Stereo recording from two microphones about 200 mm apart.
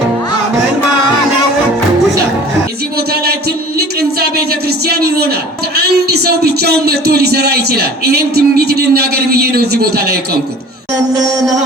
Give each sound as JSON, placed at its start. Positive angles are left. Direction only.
{"t": 4.9, "sound": "a man's voice", "side_deg": -50}